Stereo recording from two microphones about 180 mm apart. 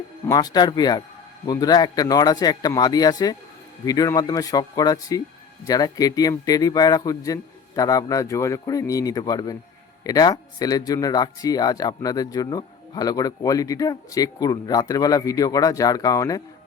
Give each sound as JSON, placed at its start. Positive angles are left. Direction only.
{"t": 0.3, "sound": "a man's voice", "side_deg": 20}